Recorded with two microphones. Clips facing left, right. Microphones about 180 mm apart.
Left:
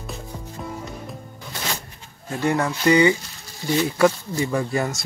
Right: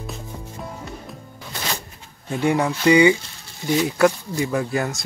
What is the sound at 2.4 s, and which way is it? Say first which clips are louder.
Speech: right 2 dB; 15° right (ahead or behind).